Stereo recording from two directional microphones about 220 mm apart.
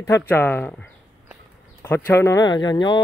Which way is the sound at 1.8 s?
10° left (ahead or behind).